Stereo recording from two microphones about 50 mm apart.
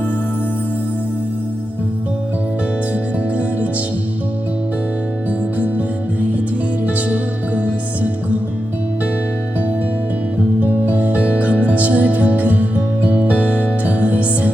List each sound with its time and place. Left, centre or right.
2.9 s music: right
5.5 s music: right
10.8 s music: right